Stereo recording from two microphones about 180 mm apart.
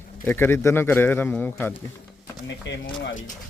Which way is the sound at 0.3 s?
10° left (ahead or behind).